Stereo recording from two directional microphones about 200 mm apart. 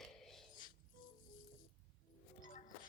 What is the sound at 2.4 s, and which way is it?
Music, 40° left (ahead or behind).